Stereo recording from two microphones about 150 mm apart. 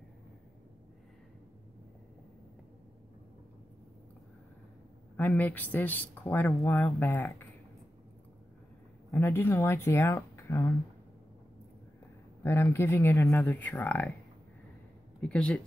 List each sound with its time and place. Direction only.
5.1 s speech: 10° left (ahead or behind)
9.1 s speech: 15° left (ahead or behind)
12.4 s speech: 15° left (ahead or behind)
15.1 s speech: 5° left (ahead or behind)